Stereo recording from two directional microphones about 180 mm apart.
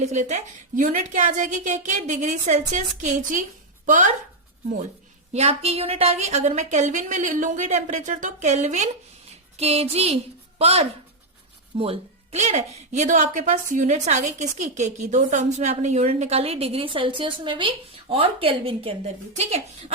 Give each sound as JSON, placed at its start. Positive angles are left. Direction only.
{"t": 0.0, "sound": "a woman's voice", "side_deg": -40}
{"t": 5.3, "sound": "a woman's voice", "side_deg": -35}